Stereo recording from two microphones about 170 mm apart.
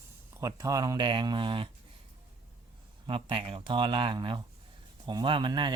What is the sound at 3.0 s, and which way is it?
Speech, 30° right (ahead or behind).